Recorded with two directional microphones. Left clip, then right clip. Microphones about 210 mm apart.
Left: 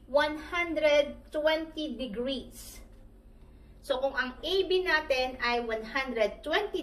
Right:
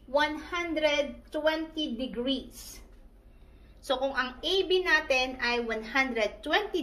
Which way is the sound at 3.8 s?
45° right (ahead or behind).